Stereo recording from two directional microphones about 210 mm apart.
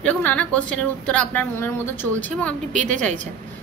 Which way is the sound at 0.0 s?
5° left (ahead or behind).